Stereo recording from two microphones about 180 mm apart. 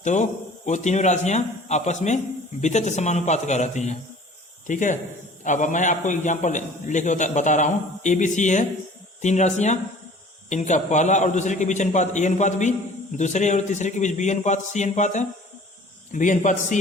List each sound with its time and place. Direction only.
0.0 s a man's voice: 40° left (ahead or behind)